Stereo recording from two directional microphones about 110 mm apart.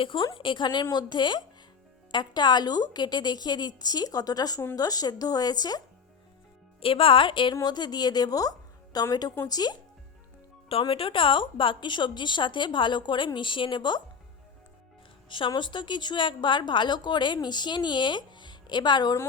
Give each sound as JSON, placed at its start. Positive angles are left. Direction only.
{"t": 0.0, "sound": "a woman's voice", "side_deg": 50}
{"t": 6.7, "sound": "a woman's voice", "side_deg": 55}
{"t": 10.7, "sound": "a woman's voice", "side_deg": 55}
{"t": 15.3, "sound": "a woman's voice", "side_deg": 45}